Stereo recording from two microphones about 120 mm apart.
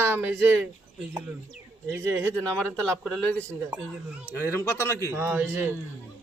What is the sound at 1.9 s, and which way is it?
Speech, 20° right (ahead or behind).